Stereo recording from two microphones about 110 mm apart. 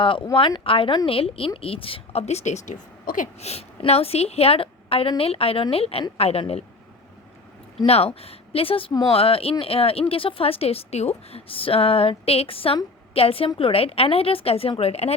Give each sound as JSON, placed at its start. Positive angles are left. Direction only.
{"t": 0.0, "sound": "speech", "side_deg": 50}
{"t": 3.4, "sound": "speech", "side_deg": 70}
{"t": 7.9, "sound": "speech", "side_deg": 65}